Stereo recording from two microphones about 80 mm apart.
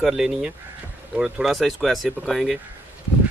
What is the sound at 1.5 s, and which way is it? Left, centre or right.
Speech, centre.